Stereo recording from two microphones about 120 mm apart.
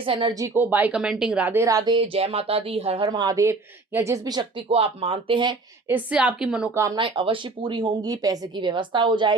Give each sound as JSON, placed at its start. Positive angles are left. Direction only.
{"t": 0.0, "sound": "speech", "side_deg": -45}
{"t": 0.3, "sound": "speech", "side_deg": -20}
{"t": 1.6, "sound": "speech", "side_deg": -30}
{"t": 2.0, "sound": "speech", "side_deg": -55}
{"t": 3.1, "sound": "speech", "side_deg": -35}
{"t": 4.7, "sound": "speech", "side_deg": -55}
{"t": 5.9, "sound": "speech", "side_deg": -10}
{"t": 6.9, "sound": "speech", "side_deg": -45}